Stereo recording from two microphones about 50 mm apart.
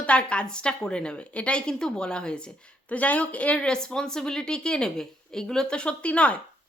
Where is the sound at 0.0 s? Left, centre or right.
Left.